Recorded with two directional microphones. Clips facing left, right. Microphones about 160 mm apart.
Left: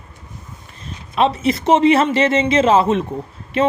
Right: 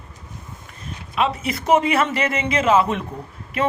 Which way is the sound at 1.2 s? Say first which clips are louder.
Left 6 dB; 30° left (ahead or behind).